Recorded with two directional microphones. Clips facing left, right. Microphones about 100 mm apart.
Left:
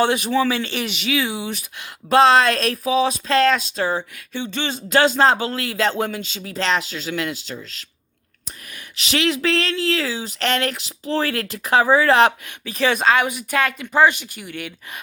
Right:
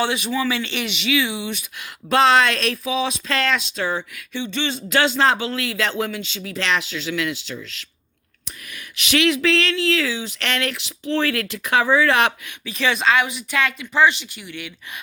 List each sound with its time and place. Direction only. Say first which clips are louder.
0.0 s speech: left 4 dB; 45° left (ahead or behind)
9.0 s speech: right 2 dB; 30° left (ahead or behind)